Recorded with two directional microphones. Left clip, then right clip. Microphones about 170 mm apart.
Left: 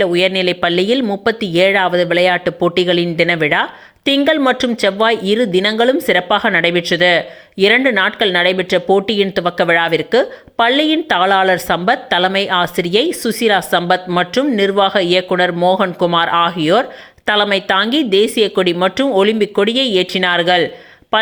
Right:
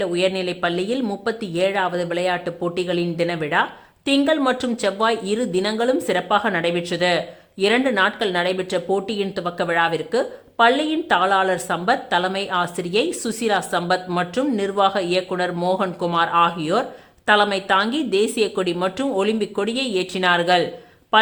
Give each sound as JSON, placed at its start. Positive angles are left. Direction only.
{"t": 0.0, "sound": "speech", "side_deg": 25}